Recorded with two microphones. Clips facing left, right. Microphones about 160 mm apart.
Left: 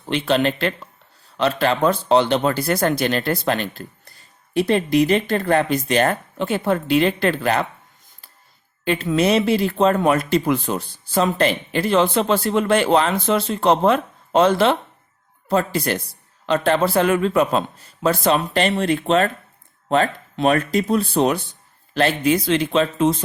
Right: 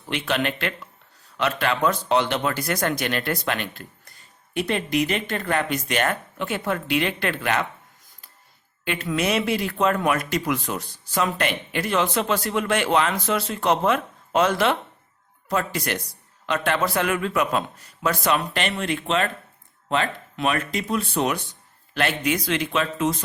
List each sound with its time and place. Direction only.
0.0 s speech: 30° left (ahead or behind)
8.8 s speech: 30° left (ahead or behind)